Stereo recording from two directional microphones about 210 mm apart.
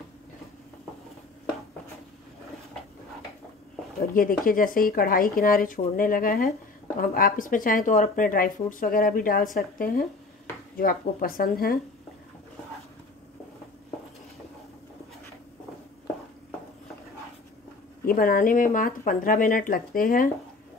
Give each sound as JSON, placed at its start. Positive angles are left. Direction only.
{"t": 4.1, "sound": "speech", "side_deg": 40}
{"t": 18.0, "sound": "speech", "side_deg": 45}